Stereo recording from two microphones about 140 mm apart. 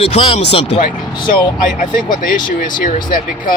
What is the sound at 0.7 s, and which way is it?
Speech, 65° left (ahead or behind).